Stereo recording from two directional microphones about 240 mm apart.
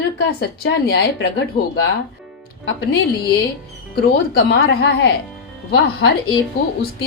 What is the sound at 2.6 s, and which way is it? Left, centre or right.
Speech, left.